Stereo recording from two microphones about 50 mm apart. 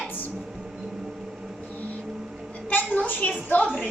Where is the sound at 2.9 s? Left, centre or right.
Left.